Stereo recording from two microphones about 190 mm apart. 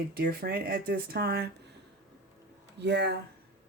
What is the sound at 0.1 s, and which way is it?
Speech, 55° right (ahead or behind).